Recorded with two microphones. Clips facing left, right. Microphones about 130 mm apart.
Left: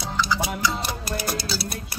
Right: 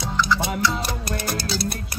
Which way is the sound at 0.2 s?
Centre (ahead or behind).